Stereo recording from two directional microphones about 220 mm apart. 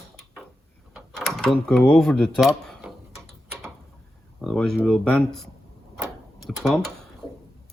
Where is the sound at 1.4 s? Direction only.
5° left (ahead or behind).